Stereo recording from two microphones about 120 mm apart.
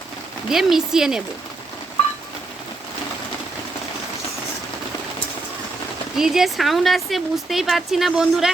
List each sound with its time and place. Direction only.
0.4 s speech: 5° right (ahead or behind)
6.1 s speech: 5° right (ahead or behind)